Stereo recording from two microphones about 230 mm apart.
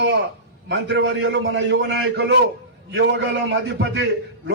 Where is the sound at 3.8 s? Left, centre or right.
Right.